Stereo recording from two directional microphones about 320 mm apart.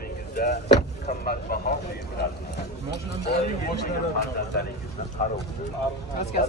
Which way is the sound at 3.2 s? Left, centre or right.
Left.